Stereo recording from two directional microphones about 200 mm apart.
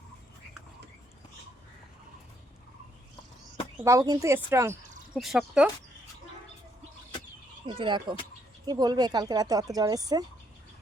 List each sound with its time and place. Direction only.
3.8 s a woman's voice: 15° right (ahead or behind)
5.1 s speech: centre (ahead or behind)
7.7 s speech: 25° right (ahead or behind)